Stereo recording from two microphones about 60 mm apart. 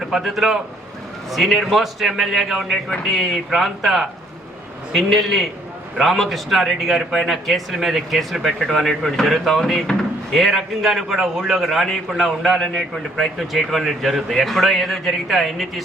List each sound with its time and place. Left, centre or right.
0.0 s a man's voice: centre
5.0 s a man's voice: centre